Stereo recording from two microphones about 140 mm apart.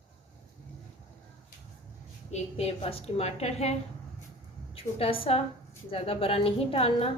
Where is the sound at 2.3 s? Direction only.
50° left (ahead or behind).